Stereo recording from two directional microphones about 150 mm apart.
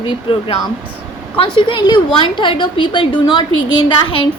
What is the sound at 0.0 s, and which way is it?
A woman's voice, 35° left (ahead or behind).